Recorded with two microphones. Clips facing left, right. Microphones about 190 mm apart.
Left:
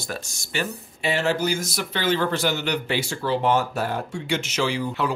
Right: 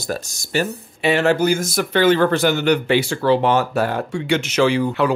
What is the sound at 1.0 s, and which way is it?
Speech, 65° right (ahead or behind).